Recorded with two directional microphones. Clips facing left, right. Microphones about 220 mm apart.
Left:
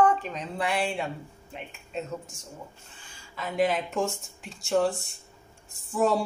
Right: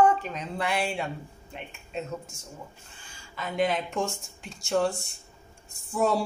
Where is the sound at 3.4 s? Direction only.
Centre (ahead or behind).